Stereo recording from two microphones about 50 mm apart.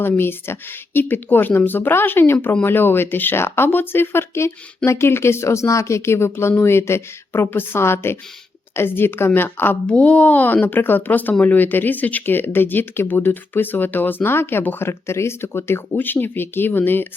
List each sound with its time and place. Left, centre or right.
0.0 s speech: left
9.8 s speech: left
16.0 s speech: left